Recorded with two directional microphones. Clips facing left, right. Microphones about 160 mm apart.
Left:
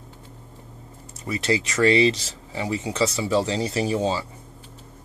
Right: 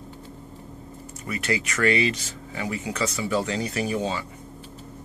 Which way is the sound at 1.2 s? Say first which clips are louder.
Left 4 dB; 30° left (ahead or behind).